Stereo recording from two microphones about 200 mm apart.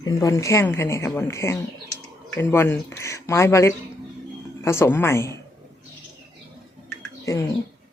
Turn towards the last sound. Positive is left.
turn(degrees=15)  # may be behind; listen again after turning